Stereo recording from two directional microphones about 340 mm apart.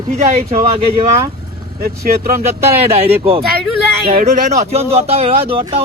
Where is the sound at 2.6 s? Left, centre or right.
Centre.